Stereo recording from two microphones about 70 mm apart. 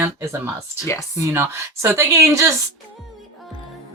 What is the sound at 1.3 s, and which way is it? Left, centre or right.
Speech, right.